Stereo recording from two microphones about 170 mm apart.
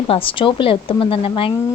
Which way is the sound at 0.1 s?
30° left (ahead or behind).